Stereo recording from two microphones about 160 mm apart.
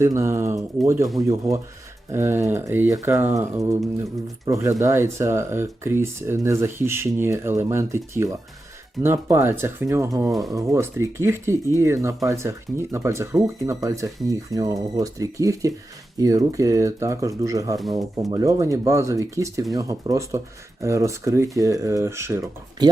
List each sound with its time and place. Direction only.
0.0 s speech: 15° right (ahead or behind)